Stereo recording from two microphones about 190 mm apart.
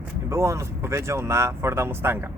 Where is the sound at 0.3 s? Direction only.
15° right (ahead or behind).